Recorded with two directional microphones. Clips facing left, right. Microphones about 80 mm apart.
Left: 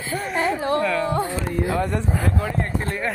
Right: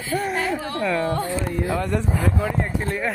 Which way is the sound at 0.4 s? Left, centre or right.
Left.